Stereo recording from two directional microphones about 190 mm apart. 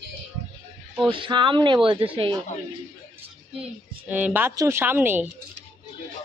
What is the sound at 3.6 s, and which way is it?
A woman's voice, 10° right (ahead or behind).